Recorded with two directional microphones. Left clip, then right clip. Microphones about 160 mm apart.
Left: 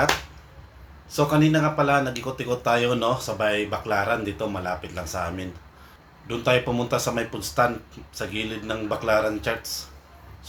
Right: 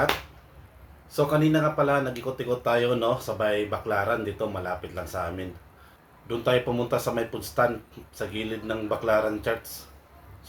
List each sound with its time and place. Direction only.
1.1 s speech: 20° right (ahead or behind)